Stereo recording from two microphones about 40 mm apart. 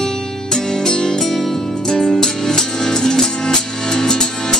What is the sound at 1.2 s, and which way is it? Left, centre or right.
Music, centre.